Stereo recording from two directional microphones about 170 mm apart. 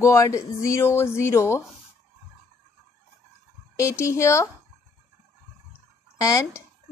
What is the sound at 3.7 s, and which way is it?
Speech, 15° left (ahead or behind).